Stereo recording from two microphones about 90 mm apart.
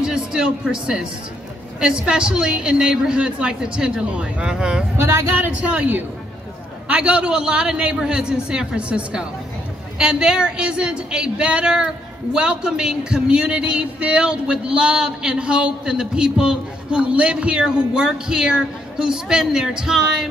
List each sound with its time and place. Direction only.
0.0 s speech: 10° right (ahead or behind)
4.9 s a man's voice: 30° right (ahead or behind); by 20.2 s 5° right (ahead or behind)